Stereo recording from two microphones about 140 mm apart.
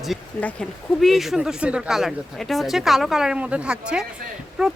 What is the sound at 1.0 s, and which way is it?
Speech, centre (ahead or behind).